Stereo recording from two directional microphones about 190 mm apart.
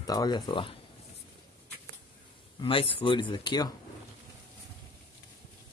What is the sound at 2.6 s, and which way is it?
Speech, 30° left (ahead or behind).